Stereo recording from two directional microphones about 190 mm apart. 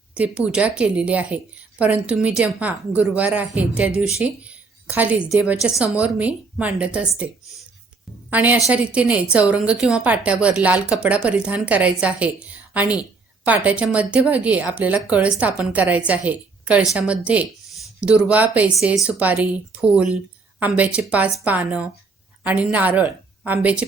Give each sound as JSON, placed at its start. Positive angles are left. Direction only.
{"t": 0.3, "sound": "a woman's voice", "side_deg": -5}
{"t": 8.3, "sound": "a woman's voice", "side_deg": -10}